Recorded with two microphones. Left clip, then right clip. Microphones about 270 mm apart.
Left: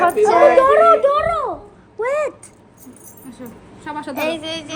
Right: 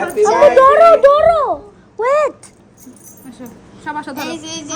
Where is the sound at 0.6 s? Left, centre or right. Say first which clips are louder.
Right 5 dB; right.